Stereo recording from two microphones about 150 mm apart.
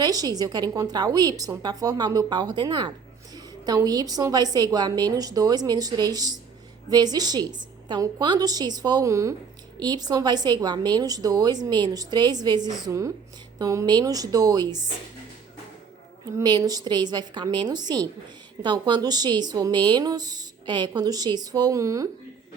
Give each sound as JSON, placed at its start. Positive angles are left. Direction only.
{"t": 0.0, "sound": "speech", "side_deg": -25}
{"t": 16.2, "sound": "speech", "side_deg": -25}